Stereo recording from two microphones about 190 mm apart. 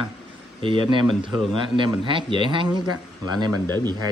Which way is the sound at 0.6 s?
25° right (ahead or behind).